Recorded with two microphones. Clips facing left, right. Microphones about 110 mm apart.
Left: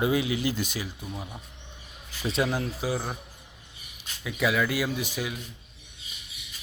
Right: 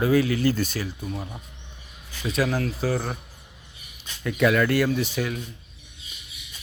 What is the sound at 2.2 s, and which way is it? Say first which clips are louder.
Speech: right 2 dB; 30° left (ahead or behind).